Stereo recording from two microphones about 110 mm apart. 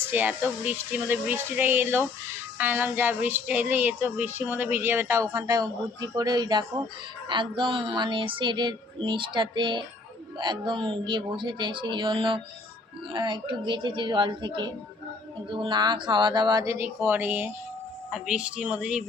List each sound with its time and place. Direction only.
0.0 s speech: 15° right (ahead or behind); by 6.8 s 40° right (ahead or behind)
7.3 s a sound: 45° right (ahead or behind)
16.6 s speech: 20° right (ahead or behind)
18.1 s speech: 5° right (ahead or behind)